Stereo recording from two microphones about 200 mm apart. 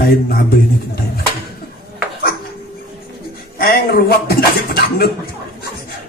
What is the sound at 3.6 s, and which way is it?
Speech, 50° left (ahead or behind).